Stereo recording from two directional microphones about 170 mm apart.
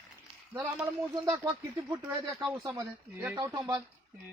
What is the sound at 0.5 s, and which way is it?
Speech, 15° right (ahead or behind).